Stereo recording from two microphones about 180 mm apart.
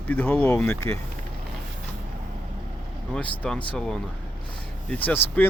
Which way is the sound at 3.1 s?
5° left (ahead or behind).